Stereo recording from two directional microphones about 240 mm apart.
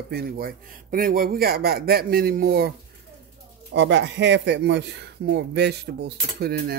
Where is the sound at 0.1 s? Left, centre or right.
Right.